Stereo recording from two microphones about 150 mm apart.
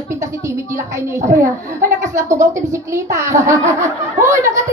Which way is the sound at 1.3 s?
20° right (ahead or behind).